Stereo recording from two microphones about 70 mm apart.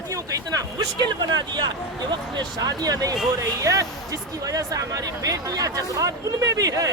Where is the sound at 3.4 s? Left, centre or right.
Right.